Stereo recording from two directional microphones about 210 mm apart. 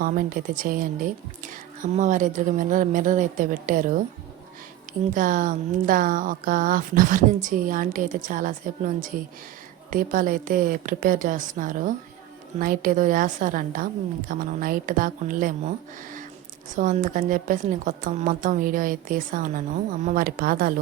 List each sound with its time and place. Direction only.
0.0 s speech: 40° right (ahead or behind)
5.1 s speech: 40° right (ahead or behind)
16.7 s speech: 40° right (ahead or behind)